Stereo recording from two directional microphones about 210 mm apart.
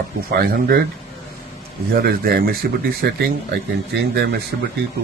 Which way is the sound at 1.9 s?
45° right (ahead or behind).